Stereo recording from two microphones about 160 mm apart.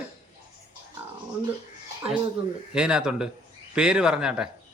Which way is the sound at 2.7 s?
5° right (ahead or behind).